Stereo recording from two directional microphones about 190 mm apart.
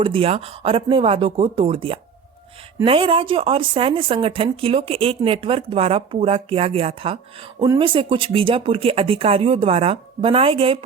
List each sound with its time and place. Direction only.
0.0 s speech: 30° right (ahead or behind)